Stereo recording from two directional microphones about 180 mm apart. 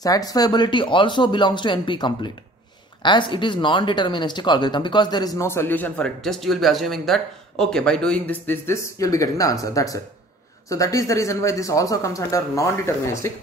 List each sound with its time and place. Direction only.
0.0 s speech: 20° left (ahead or behind)